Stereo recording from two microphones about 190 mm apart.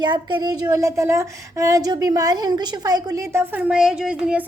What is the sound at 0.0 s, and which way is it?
A woman's voice, 20° right (ahead or behind).